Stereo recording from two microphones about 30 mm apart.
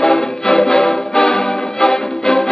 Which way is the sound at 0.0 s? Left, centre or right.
Centre.